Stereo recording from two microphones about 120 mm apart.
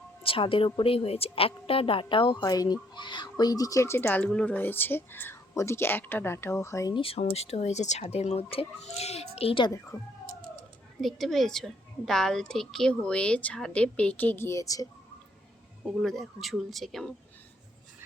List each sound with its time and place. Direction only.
0.2 s a woman's voice: 50° left (ahead or behind); by 6.9 s 25° left (ahead or behind)
6.9 s speech: 50° left (ahead or behind)
11.0 s a woman's voice: centre (ahead or behind); by 14.8 s 30° left (ahead or behind)
15.8 s speech: centre (ahead or behind)